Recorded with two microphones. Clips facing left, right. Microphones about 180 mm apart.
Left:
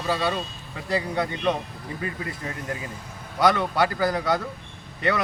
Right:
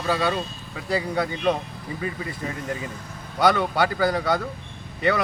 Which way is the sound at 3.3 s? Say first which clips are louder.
Right 1 dB; centre (ahead or behind).